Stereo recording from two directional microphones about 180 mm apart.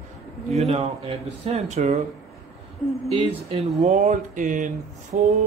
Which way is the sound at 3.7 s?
40° right (ahead or behind).